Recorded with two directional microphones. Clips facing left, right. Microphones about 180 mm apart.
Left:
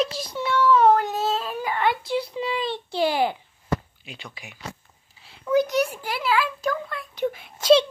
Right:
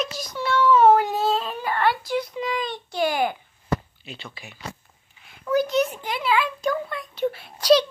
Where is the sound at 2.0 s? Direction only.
30° left (ahead or behind).